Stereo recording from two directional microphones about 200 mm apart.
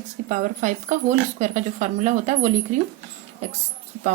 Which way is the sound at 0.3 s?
40° right (ahead or behind).